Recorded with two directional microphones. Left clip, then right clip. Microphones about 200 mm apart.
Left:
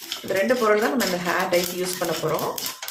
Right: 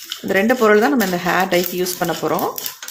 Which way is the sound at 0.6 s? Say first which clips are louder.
Right 6 dB; 50° right (ahead or behind).